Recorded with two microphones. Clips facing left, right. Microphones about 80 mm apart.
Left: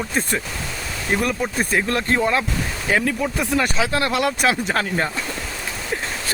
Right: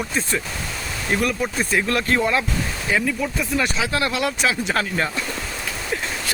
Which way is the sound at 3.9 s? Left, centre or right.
Left.